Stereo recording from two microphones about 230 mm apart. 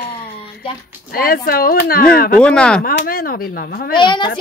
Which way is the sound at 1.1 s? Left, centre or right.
Left.